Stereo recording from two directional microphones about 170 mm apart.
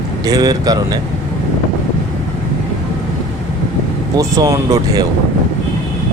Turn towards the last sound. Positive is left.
turn(degrees=-20)  # may be behind; listen again after turning